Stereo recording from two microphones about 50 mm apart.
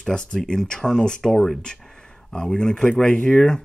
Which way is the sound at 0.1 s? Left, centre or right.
Centre.